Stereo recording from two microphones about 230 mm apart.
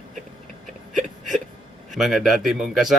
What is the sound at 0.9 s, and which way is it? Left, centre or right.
Whimper, centre.